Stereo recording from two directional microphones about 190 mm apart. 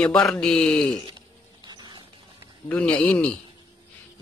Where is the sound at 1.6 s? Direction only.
20° right (ahead or behind).